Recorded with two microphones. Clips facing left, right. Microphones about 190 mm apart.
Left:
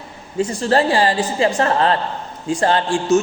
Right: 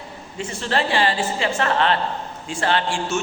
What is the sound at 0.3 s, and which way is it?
A man's voice, 40° left (ahead or behind).